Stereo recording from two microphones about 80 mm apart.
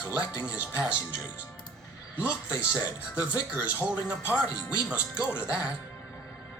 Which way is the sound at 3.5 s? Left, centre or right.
Right.